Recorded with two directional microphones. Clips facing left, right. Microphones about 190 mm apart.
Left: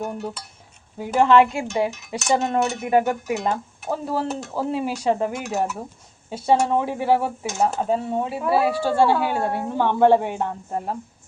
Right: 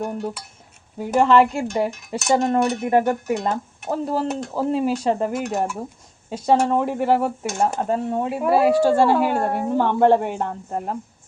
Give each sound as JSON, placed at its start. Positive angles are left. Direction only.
{"t": 0.0, "sound": "speech", "side_deg": 0}
{"t": 8.4, "sound": "speech", "side_deg": -45}
{"t": 9.0, "sound": "speech", "side_deg": 5}